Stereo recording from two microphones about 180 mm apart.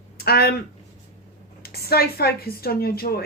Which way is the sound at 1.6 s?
60° left (ahead or behind).